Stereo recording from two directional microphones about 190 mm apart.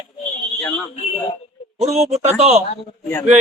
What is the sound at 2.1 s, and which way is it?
Speech, 35° right (ahead or behind).